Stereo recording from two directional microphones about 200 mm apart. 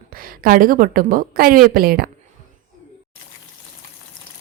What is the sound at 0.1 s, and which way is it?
A woman's voice, 45° right (ahead or behind).